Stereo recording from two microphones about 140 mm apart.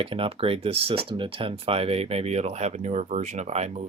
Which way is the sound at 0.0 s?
40° right (ahead or behind).